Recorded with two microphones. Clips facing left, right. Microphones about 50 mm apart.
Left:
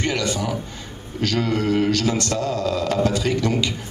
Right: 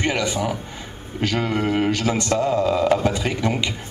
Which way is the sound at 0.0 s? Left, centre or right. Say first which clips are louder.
Right 1 dB; centre.